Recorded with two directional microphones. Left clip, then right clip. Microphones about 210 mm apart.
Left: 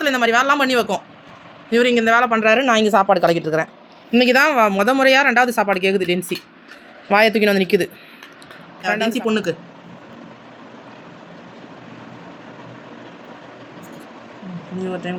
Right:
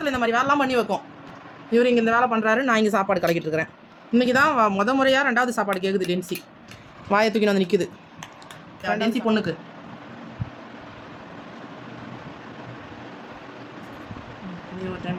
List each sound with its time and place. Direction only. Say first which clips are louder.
0.0 s speech: left 6 dB; 25° left (ahead or behind); by 3.7 s centre (ahead or behind)
4.1 s speech: left 5 dB; 15° left (ahead or behind)
7.1 s speech: left 6 dB; 5° left (ahead or behind)